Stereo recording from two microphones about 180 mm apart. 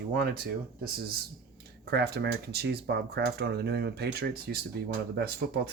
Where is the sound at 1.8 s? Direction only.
65° right (ahead or behind).